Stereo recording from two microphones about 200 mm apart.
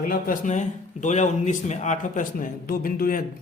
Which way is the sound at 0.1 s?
40° left (ahead or behind).